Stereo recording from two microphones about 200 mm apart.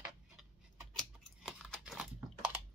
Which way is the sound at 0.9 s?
Centre (ahead or behind).